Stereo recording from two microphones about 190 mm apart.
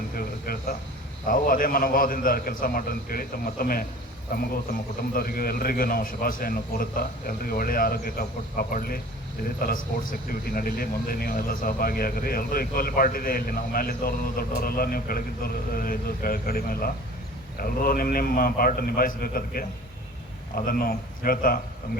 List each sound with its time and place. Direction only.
0.2 s a man's voice: 50° left (ahead or behind)